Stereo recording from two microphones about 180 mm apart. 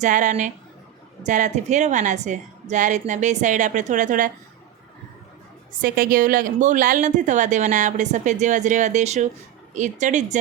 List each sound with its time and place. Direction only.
0.0 s speech: 45° right (ahead or behind)
5.8 s speech: 50° right (ahead or behind)